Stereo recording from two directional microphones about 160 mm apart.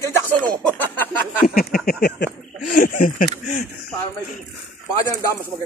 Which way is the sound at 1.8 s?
80° left.